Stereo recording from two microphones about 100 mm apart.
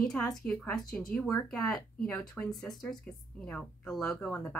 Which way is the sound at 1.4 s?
15° left (ahead or behind).